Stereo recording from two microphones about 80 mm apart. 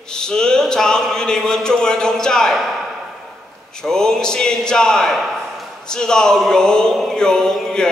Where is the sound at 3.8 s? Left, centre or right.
Centre.